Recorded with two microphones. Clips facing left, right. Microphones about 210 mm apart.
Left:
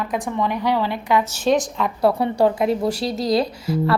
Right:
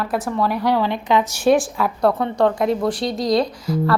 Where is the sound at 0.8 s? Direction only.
20° right (ahead or behind).